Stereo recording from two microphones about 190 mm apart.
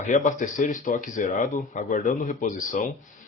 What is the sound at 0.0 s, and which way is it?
Speech, 40° left (ahead or behind).